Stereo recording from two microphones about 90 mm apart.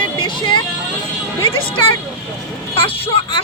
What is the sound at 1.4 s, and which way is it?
Music, 80° left.